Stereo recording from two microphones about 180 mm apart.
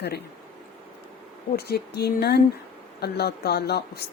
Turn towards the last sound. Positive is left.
turn(degrees=65)  # may be behind; listen again after turning